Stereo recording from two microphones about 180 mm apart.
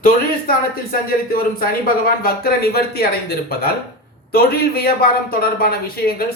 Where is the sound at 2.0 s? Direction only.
55° left (ahead or behind).